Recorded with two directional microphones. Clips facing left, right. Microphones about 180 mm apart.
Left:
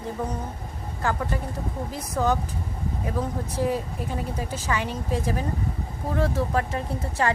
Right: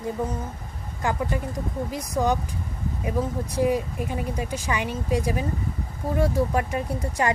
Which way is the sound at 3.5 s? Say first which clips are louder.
Right 4 dB; 10° right (ahead or behind).